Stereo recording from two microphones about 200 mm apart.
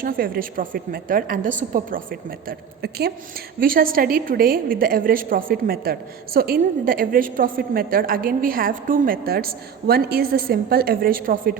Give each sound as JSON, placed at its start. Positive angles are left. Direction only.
{"t": 0.0, "sound": "a woman's voice", "side_deg": -45}
{"t": 2.5, "sound": "a woman's voice", "side_deg": -55}